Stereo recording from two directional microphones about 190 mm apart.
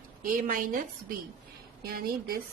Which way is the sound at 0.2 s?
45° right (ahead or behind).